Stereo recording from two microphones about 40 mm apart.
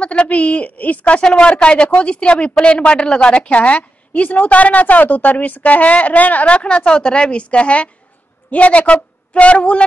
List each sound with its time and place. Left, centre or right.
0.0 s a woman's voice: left
1.2 s a woman's voice: left
3.4 s a woman's voice: left
6.5 s a woman's voice: left